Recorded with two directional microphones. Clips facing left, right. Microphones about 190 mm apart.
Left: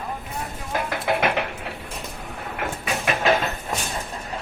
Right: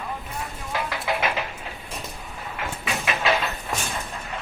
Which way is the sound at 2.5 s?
50° left (ahead or behind).